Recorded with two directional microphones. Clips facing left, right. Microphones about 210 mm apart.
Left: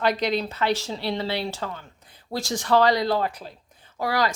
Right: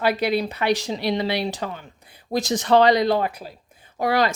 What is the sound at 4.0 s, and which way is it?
Speech, 25° right (ahead or behind).